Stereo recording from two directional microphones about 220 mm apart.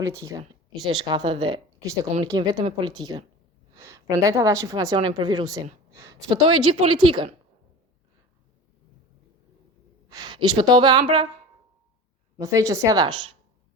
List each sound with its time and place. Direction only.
0.0 s a woman's voice: 15° right (ahead or behind)
6.5 s speech: 90° right
6.7 s speech: 25° right (ahead or behind)
10.1 s a woman's voice: 20° right (ahead or behind)
12.4 s a woman's voice: 15° right (ahead or behind)